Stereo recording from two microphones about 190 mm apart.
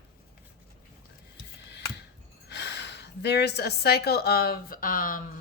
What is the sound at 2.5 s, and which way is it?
A woman's voice, 65° left (ahead or behind).